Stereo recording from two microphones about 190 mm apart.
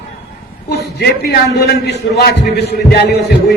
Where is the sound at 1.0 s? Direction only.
60° left (ahead or behind).